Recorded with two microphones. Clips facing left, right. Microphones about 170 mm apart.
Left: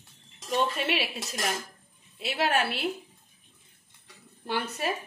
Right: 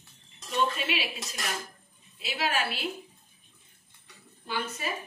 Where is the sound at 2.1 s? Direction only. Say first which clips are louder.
Left 4 dB; 60° left (ahead or behind).